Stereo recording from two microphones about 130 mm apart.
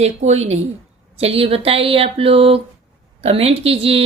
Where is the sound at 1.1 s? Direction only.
50° right (ahead or behind).